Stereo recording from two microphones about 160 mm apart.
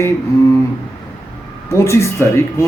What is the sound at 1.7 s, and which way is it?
Speech, 20° left (ahead or behind).